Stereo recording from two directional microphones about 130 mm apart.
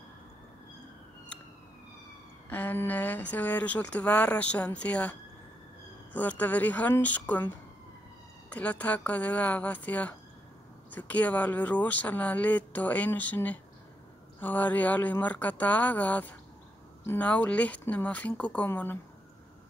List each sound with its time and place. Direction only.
2.5 s speech: 15° left (ahead or behind)
6.1 s speech: 10° left (ahead or behind)
8.5 s speech: 10° left (ahead or behind)